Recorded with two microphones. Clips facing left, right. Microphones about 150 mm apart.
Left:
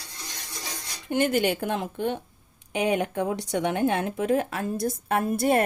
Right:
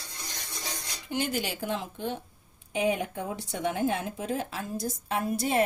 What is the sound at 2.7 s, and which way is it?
Speech, 70° left (ahead or behind).